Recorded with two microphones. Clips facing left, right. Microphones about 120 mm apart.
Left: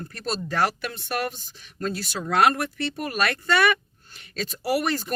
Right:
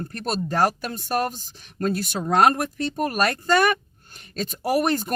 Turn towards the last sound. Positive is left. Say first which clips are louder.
# right 3 dB
turn(degrees=-50)  # may be behind; listen again after turning